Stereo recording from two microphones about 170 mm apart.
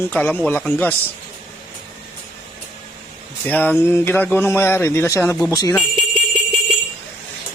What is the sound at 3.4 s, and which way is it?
Speech, 10° left (ahead or behind).